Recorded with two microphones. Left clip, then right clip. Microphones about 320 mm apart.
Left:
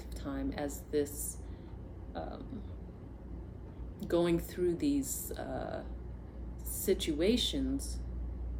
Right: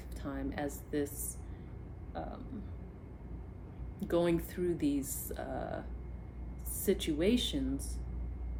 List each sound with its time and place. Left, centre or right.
0.2 s speech: centre
4.0 s speech: centre
6.8 s speech: centre